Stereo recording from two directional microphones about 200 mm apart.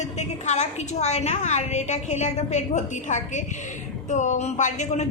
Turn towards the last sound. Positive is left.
turn(degrees=35)  # may be behind; listen again after turning